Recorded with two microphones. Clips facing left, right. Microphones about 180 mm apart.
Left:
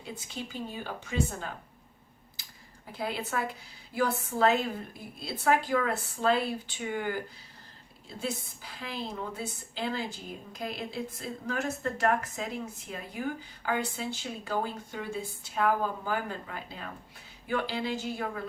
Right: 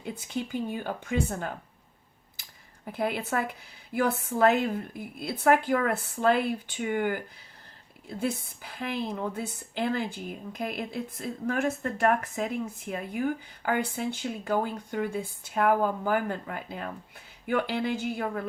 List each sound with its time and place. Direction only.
0.0 s a woman's voice: 55° right (ahead or behind)
2.8 s a woman's voice: 55° right (ahead or behind)
8.8 s a woman's voice: 55° right (ahead or behind)